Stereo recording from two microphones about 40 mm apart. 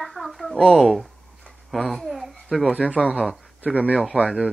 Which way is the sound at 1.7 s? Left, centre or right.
Centre.